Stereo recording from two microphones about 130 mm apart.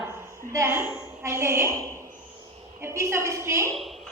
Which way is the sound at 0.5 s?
20° right (ahead or behind).